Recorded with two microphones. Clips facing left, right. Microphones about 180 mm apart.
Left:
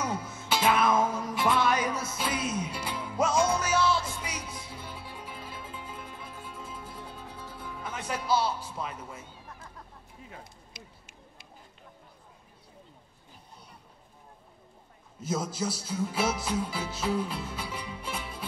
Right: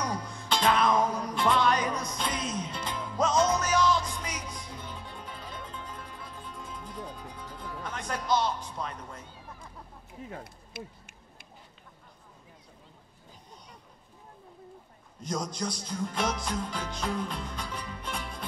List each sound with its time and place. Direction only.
0.0 s music: 5° left (ahead or behind)
7.0 s music: 15° right (ahead or behind)
7.3 s speech: 10° left (ahead or behind)
10.3 s a sound: 55° right (ahead or behind)
15.1 s speech: 5° left (ahead or behind)